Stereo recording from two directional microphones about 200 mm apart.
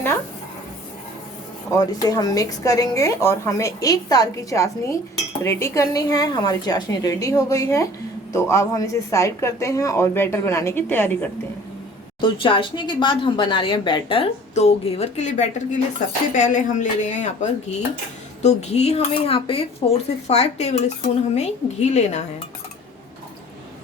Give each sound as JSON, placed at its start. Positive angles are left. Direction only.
{"t": 1.8, "sound": "a woman's voice", "side_deg": 20}
{"t": 12.2, "sound": "speech", "side_deg": 25}